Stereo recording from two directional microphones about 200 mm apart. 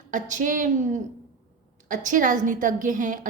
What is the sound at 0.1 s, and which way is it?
Speech, 40° right (ahead or behind).